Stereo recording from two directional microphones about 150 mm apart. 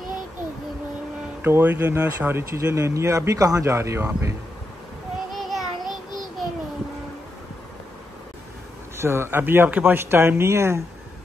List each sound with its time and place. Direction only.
1.4 s speech: 15° right (ahead or behind)
5.3 s child singing: centre (ahead or behind)
8.9 s a man's voice: 15° right (ahead or behind)